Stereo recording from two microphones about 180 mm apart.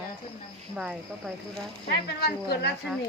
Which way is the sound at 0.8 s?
5° right (ahead or behind).